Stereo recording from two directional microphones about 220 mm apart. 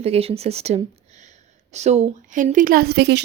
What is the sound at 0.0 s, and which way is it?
Speech, 25° right (ahead or behind).